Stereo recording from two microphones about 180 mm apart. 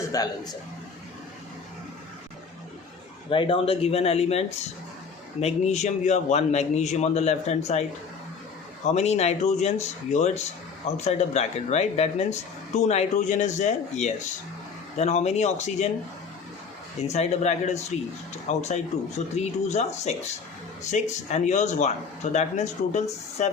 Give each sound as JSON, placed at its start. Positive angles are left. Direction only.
{"t": 0.1, "sound": "a man's voice", "side_deg": 20}
{"t": 3.2, "sound": "speech", "side_deg": 30}
{"t": 8.9, "sound": "speech", "side_deg": 40}
{"t": 17.1, "sound": "speech", "side_deg": 40}